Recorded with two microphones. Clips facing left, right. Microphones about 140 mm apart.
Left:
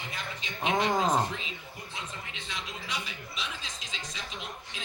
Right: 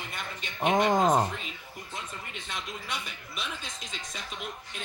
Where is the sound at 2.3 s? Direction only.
50° right (ahead or behind).